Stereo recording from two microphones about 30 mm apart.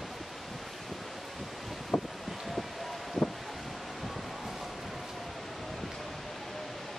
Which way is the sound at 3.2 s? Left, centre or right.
Centre.